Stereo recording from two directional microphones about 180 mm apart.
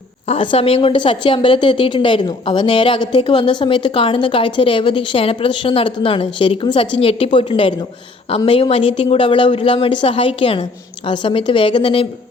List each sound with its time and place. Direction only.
0.3 s a woman's voice: 30° left (ahead or behind)